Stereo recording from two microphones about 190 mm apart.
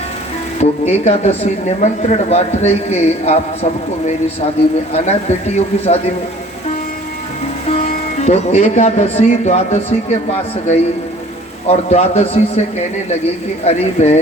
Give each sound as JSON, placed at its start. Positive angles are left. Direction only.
{"t": 0.6, "sound": "speech", "side_deg": 35}
{"t": 7.7, "sound": "speech", "side_deg": 35}
{"t": 11.7, "sound": "speech", "side_deg": 35}
{"t": 13.7, "sound": "speech", "side_deg": 35}